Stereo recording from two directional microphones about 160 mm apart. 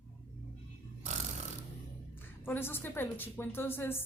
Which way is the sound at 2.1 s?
15° left (ahead or behind).